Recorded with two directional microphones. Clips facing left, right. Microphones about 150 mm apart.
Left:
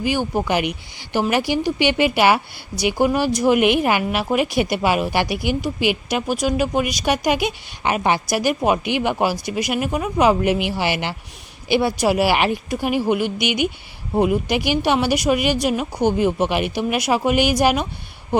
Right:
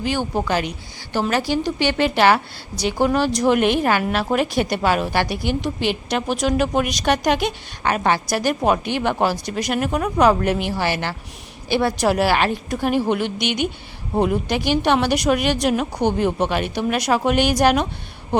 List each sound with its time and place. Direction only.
0.0 s speech: 10° left (ahead or behind)